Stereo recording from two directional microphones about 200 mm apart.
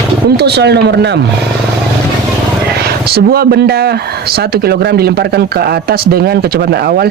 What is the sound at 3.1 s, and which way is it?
Speech, 50° right (ahead or behind).